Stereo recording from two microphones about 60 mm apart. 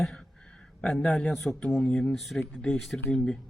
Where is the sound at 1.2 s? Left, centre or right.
Centre.